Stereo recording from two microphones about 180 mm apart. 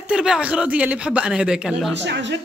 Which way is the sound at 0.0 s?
5° right (ahead or behind).